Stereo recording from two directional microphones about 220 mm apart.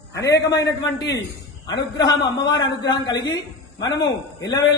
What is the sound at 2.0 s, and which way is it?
A man's voice, 20° left (ahead or behind).